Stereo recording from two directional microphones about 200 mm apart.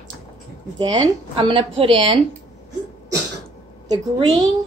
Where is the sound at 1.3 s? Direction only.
25° right (ahead or behind).